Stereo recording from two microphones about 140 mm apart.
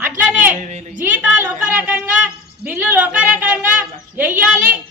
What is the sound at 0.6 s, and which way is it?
Speech, 55° right (ahead or behind).